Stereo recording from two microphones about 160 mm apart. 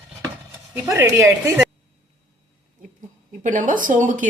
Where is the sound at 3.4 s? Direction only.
55° right (ahead or behind).